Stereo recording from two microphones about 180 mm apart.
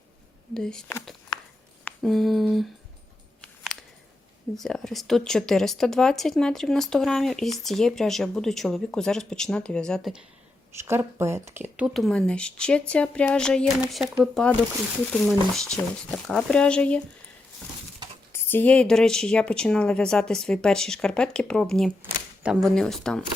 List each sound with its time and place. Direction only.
0.5 s speech: 5° left (ahead or behind)
1.8 s a sound: centre (ahead or behind)
4.5 s speech: centre (ahead or behind)
10.8 s speech: 15° right (ahead or behind)
11.9 s speech: 5° left (ahead or behind)
15.1 s speech: centre (ahead or behind)
18.3 s speech: 10° left (ahead or behind)